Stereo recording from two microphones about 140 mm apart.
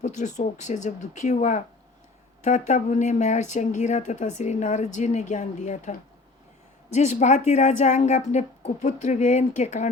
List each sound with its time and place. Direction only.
0.0 s speech: 60° left (ahead or behind)
6.9 s speech: 55° left (ahead or behind)